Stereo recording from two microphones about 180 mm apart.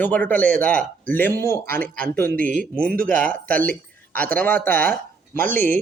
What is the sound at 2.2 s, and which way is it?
Speech, 50° right (ahead or behind).